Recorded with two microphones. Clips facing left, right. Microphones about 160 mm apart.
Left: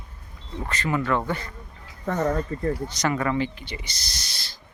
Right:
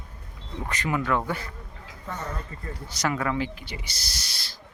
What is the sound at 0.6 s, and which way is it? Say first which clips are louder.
Speech: left 2 dB; 15° right (ahead or behind).